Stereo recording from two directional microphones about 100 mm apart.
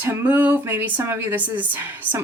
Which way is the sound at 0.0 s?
20° right (ahead or behind).